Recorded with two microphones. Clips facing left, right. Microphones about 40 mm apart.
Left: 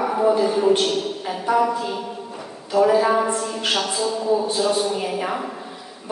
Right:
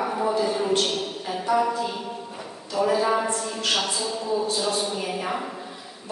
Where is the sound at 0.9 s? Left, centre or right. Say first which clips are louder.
Left 5 dB; centre.